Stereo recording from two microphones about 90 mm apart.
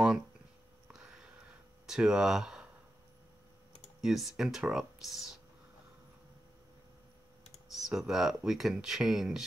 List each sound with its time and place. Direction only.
0.9 s sniff: 5° right (ahead or behind)
1.9 s speech: 5° right (ahead or behind)
4.0 s speech: 5° right (ahead or behind)
7.7 s speech: 5° right (ahead or behind)